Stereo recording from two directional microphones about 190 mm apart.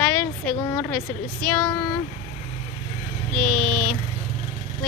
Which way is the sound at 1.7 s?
25° left (ahead or behind).